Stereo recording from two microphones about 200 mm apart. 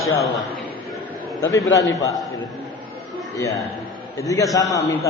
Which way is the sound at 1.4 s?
15° left (ahead or behind).